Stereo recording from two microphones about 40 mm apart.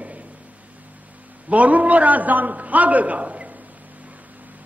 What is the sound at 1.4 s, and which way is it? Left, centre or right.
A man's voice, right.